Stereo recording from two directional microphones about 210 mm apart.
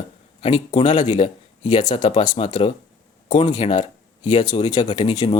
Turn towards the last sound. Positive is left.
turn(degrees=20)  # may be behind; listen again after turning